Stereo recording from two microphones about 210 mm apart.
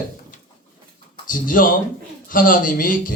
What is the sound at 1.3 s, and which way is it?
A man's voice, 40° left (ahead or behind).